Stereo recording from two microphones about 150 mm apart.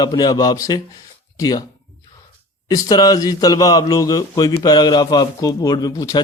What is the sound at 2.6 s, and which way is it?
A man's voice, 25° left (ahead or behind).